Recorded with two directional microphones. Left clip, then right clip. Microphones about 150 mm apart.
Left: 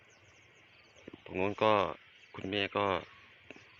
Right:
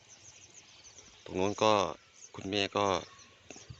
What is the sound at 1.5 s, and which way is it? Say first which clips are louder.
Speech: right 1 dB; 25° right (ahead or behind).